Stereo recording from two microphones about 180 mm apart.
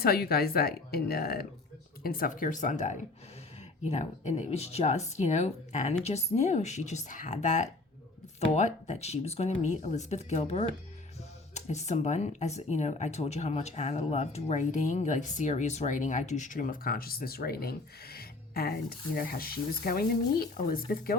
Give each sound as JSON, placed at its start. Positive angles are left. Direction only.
{"t": 0.0, "sound": "speech", "side_deg": 60}